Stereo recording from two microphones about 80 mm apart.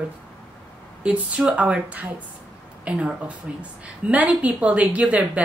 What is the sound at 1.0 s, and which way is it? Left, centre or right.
A woman's voice, centre.